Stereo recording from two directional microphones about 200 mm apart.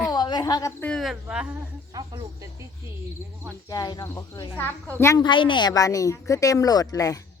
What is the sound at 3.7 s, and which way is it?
Speech, 20° left (ahead or behind).